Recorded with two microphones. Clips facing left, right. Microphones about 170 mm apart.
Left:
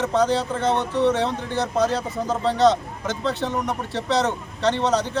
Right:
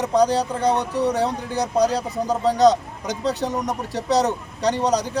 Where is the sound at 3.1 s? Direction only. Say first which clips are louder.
Right 2 dB; 40° right (ahead or behind).